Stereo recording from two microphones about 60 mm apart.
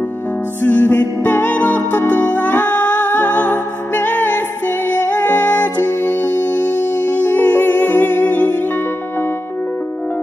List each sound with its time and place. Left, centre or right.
0.6 s music: left